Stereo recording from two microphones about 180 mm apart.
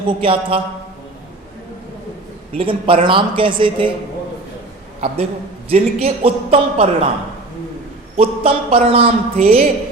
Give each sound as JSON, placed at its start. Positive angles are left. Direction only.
{"t": 0.2, "sound": "speech", "side_deg": -30}
{"t": 2.6, "sound": "speech", "side_deg": -30}
{"t": 4.9, "sound": "a man's voice", "side_deg": -35}
{"t": 8.1, "sound": "a woman's voice", "side_deg": -30}